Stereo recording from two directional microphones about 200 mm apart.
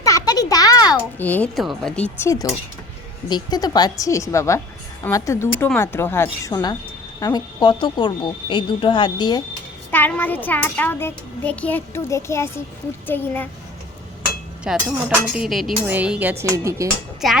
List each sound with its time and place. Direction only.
0.0 s a sound: 15° left (ahead or behind)
1.2 s speech: 5° left (ahead or behind)
2.1 s a child's voice: 15° left (ahead or behind)
9.9 s a child's voice: 10° left (ahead or behind)
14.7 s speech: 5° right (ahead or behind)
17.2 s speech: centre (ahead or behind)